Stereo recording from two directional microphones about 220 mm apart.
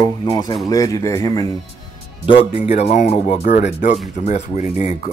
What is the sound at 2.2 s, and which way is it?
Speech, 30° left (ahead or behind).